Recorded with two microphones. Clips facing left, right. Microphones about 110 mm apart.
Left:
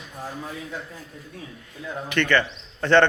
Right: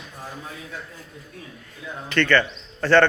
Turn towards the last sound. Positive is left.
turn(degrees=20)  # may be behind; listen again after turning